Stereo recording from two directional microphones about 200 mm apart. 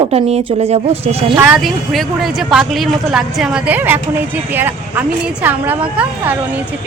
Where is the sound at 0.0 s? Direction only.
30° right (ahead or behind).